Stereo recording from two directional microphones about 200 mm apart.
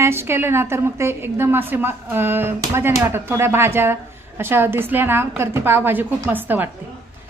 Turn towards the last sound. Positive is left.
turn(degrees=-10)  # may be behind; listen again after turning